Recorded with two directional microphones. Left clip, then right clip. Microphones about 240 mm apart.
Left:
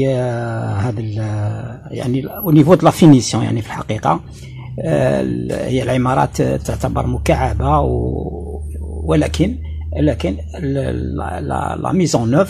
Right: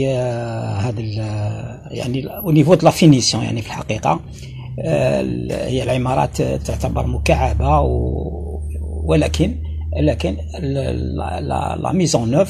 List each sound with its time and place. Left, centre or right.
0.0 s mantra: left
2.7 s speech: left
9.0 s speech: left